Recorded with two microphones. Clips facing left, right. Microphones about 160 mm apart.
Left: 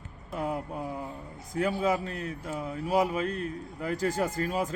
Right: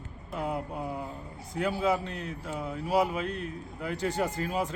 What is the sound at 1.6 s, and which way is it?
A man's voice, 45° left (ahead or behind).